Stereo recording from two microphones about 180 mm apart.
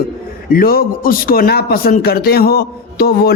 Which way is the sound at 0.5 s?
55° left (ahead or behind).